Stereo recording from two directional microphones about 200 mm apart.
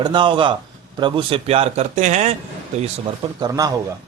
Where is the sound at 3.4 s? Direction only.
20° right (ahead or behind).